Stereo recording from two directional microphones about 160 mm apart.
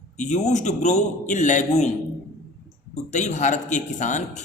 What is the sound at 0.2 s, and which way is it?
Speech, 50° left (ahead or behind).